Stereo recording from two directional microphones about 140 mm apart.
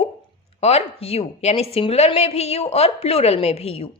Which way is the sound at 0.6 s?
45° left (ahead or behind).